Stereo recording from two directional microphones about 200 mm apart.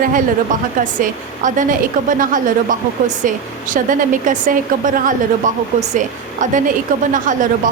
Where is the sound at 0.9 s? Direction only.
40° right (ahead or behind).